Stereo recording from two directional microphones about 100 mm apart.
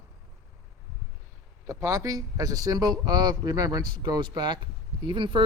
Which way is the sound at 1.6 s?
30° right (ahead or behind).